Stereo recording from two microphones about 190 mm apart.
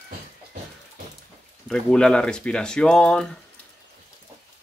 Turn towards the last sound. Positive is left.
turn(degrees=5)  # may be behind; listen again after turning